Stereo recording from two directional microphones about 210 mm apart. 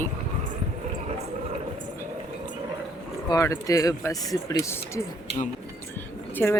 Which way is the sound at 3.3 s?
15° left (ahead or behind).